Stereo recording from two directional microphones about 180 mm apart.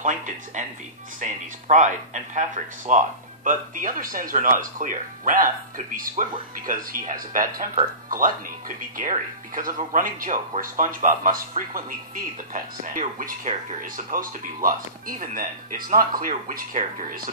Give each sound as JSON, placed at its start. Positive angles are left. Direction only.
{"t": 0.0, "sound": "speech", "side_deg": -45}